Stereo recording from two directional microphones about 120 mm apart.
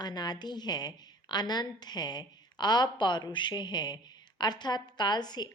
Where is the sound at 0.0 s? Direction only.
35° left (ahead or behind).